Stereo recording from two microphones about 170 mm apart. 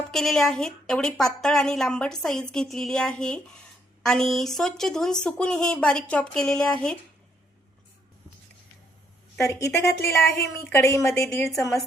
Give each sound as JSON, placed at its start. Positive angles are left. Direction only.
{"t": 0.1, "sound": "a woman's voice", "side_deg": 0}
{"t": 9.4, "sound": "speech", "side_deg": 15}